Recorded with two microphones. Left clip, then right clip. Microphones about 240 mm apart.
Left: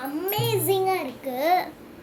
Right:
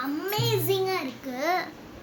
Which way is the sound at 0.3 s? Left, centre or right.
Centre.